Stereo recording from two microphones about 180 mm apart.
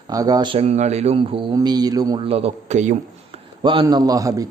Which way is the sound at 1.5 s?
20° right (ahead or behind).